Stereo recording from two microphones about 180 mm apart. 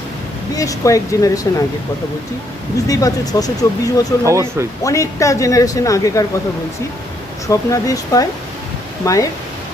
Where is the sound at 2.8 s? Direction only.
20° left (ahead or behind).